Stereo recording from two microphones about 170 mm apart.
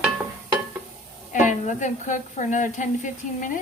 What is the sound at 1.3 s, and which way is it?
A woman's voice, 45° left (ahead or behind).